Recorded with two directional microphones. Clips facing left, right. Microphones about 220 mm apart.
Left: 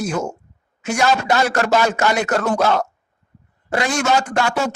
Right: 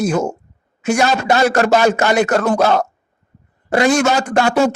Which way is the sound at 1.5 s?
35° right (ahead or behind).